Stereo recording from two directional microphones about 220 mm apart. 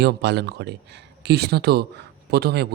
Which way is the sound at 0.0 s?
50° right (ahead or behind).